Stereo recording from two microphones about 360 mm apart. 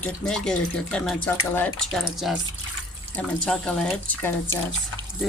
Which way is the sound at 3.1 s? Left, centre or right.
Centre.